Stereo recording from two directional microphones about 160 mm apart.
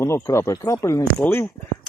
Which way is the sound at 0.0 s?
15° left (ahead or behind).